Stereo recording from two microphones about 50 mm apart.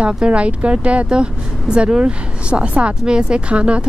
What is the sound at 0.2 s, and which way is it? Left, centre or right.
Speech, right.